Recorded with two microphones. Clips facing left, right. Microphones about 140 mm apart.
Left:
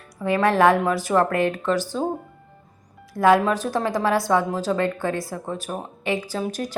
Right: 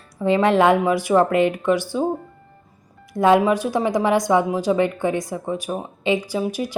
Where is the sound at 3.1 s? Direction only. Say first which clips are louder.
Right 2 dB; 20° right (ahead or behind).